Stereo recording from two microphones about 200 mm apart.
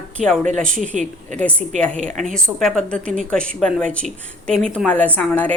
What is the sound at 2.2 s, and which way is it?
A woman's voice, 5° left (ahead or behind).